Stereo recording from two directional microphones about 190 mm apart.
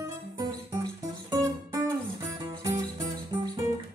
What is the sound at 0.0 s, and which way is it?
Music, 20° right (ahead or behind).